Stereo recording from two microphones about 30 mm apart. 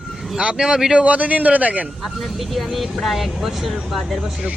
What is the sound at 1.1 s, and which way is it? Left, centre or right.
Speech, right.